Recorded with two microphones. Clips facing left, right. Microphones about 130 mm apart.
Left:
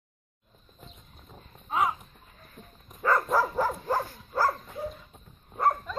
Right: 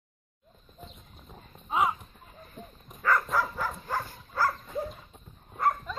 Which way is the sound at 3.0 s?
25° left (ahead or behind).